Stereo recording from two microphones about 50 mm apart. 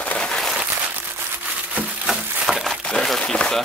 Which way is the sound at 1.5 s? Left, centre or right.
Right.